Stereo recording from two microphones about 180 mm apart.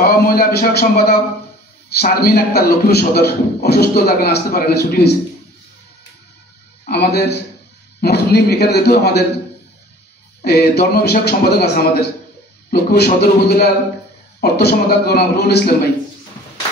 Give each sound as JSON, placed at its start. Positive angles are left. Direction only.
{"t": 0.0, "sound": "a man's voice", "side_deg": 55}
{"t": 6.9, "sound": "a man's voice", "side_deg": 60}
{"t": 10.4, "sound": "a man's voice", "side_deg": 60}